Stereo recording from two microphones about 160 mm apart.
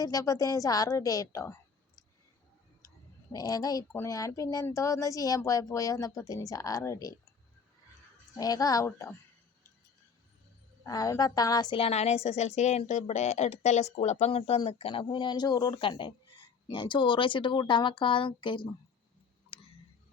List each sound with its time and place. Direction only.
0.0 s speech: 20° left (ahead or behind)
3.3 s speech: 25° left (ahead or behind)
8.4 s speech: 25° left (ahead or behind)
10.8 s a woman's voice: 20° left (ahead or behind)
19.5 s a sound: 35° left (ahead or behind)